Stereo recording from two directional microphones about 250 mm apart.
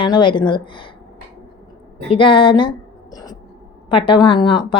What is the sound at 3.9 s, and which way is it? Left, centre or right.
Speech, centre.